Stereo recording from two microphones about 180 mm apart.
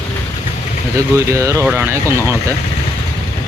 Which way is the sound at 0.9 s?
15° right (ahead or behind).